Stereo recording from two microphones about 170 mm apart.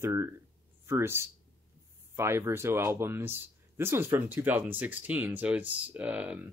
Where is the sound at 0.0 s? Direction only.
15° right (ahead or behind).